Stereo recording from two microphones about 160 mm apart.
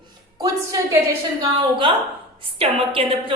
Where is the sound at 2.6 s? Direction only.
35° right (ahead or behind).